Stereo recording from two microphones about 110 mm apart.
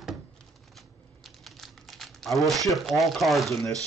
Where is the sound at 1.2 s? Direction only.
Centre (ahead or behind).